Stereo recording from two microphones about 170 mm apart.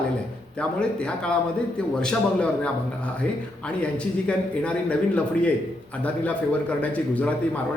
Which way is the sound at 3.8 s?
5° left (ahead or behind).